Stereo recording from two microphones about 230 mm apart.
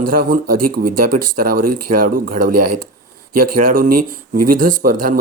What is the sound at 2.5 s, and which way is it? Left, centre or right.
Speech, right.